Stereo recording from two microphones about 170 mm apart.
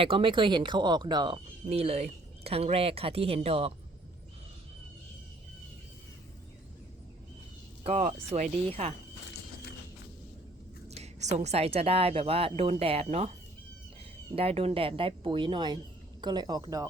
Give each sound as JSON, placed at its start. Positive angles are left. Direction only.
{"t": 0.0, "sound": "speech", "side_deg": -30}
{"t": 7.9, "sound": "speech", "side_deg": -40}
{"t": 10.8, "sound": "speech", "side_deg": -40}
{"t": 14.3, "sound": "speech", "side_deg": -35}